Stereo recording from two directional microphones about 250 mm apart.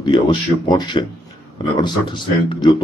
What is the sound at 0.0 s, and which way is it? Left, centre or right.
A man's voice, centre.